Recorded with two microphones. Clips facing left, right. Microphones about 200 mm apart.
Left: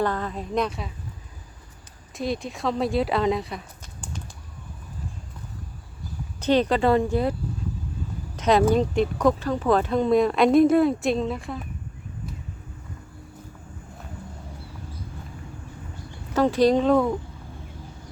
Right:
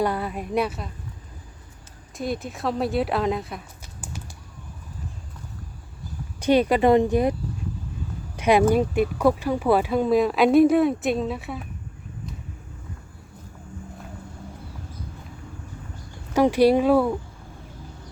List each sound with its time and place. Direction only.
0.0 s speech: 10° right (ahead or behind)
2.1 s speech: centre (ahead or behind)
6.4 s speech: 10° right (ahead or behind)
8.4 s speech: 10° right (ahead or behind)
16.3 s speech: 10° right (ahead or behind)